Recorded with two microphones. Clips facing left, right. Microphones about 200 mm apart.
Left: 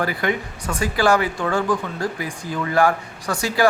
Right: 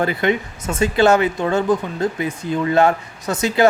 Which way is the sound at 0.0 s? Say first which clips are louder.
Right 4 dB; 25° right (ahead or behind).